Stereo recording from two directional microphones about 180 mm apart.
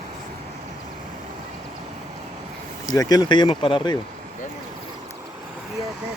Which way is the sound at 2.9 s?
20° left (ahead or behind).